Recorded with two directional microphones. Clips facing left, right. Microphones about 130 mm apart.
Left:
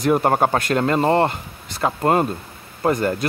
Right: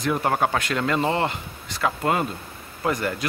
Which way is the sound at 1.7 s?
35° left (ahead or behind).